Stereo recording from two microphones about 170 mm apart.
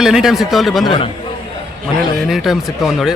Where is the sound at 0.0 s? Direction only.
Centre (ahead or behind).